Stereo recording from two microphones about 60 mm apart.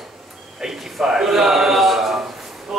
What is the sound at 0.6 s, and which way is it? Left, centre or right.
A man's voice, centre.